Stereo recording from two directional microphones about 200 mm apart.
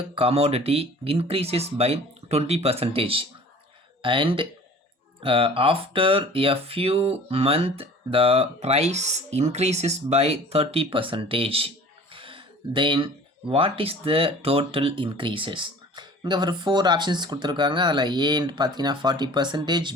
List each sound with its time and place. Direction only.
0.1 s speech: 30° right (ahead or behind)
12.1 s a sound: 25° right (ahead or behind)
13.5 s speech: 30° right (ahead or behind)